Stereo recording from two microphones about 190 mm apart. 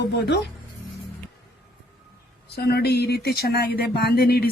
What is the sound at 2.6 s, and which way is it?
Speech, 55° left (ahead or behind).